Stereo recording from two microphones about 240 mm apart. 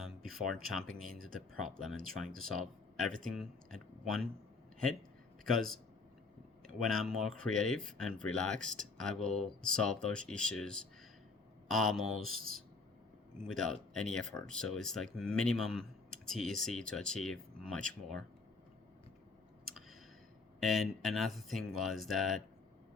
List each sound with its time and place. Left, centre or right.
0.3 s speech: centre
1.1 s speech: right
1.7 s speech: centre
5.5 s speech: centre
13.5 s speech: centre
20.6 s speech: centre